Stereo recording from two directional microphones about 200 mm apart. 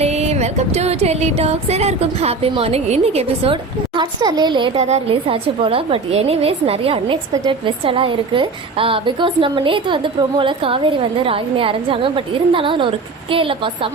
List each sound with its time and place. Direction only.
0.0 s music: 35° right (ahead or behind)
7.3 s a woman's voice: 20° right (ahead or behind)